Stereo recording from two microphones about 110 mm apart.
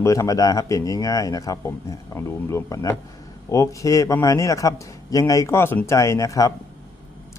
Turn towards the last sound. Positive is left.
turn(degrees=30)  # may be behind; listen again after turning